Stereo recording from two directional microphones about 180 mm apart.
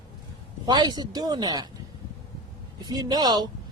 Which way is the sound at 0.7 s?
20° right (ahead or behind).